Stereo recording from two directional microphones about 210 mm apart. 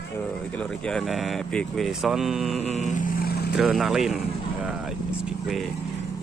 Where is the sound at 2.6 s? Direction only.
35° left (ahead or behind).